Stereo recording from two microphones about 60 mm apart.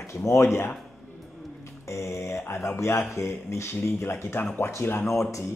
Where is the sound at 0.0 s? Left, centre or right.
Left.